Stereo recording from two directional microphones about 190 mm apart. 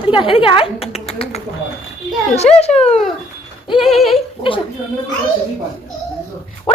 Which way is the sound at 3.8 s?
Centre (ahead or behind).